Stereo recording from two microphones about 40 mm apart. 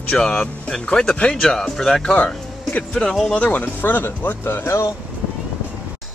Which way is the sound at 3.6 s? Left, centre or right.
Left.